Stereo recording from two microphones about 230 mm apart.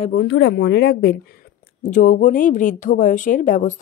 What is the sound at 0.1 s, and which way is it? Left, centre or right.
Speech, left.